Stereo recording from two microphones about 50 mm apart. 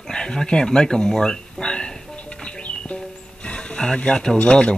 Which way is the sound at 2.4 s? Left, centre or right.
Left.